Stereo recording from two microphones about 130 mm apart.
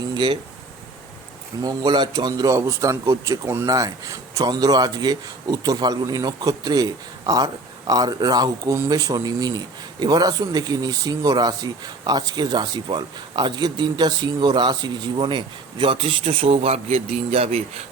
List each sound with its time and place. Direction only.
1.6 s speech: 30° right (ahead or behind); by 17.8 s 50° right (ahead or behind)